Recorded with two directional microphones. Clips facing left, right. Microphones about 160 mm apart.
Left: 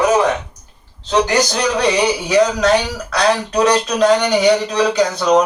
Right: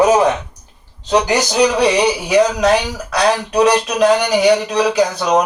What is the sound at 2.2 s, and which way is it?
Speech, 5° right (ahead or behind).